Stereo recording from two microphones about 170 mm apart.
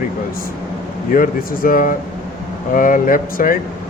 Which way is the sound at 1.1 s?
55° left (ahead or behind).